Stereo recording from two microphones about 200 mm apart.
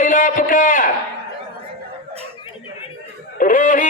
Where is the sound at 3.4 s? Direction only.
40° left (ahead or behind).